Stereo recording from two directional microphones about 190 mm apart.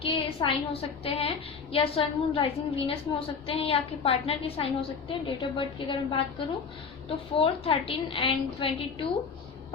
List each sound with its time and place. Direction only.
0.0 s a woman's voice: 30° left (ahead or behind)
7.3 s a woman's voice: 30° left (ahead or behind)